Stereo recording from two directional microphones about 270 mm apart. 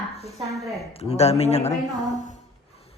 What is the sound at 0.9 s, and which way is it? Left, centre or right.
A man's voice, left.